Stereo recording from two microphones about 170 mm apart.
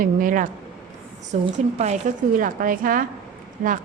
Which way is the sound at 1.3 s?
45° right (ahead or behind).